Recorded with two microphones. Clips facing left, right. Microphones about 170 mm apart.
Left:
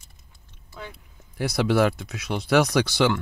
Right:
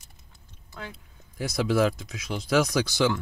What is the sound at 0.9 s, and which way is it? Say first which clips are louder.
Speech: right 1 dB; 70° left (ahead or behind).